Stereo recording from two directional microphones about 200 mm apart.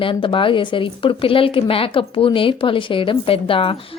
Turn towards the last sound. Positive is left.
turn(degrees=25)  # may be behind; listen again after turning